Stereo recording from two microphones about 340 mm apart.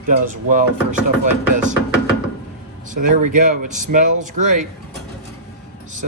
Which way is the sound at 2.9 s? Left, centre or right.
Right.